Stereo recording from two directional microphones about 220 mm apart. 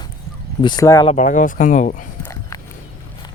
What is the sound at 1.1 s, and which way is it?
Speech, 35° left (ahead or behind).